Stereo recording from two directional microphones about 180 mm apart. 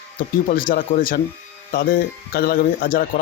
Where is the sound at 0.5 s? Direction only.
50° left (ahead or behind).